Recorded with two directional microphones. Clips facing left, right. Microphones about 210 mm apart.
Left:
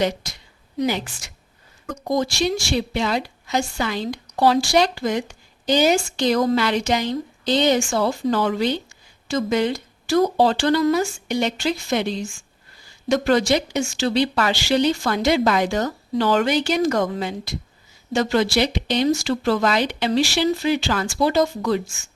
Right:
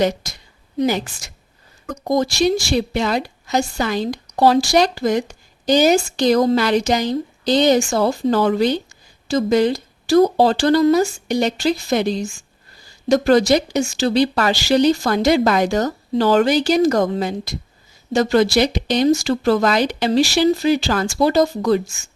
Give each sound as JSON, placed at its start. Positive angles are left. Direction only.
{"t": 0.0, "sound": "a woman's voice", "side_deg": -45}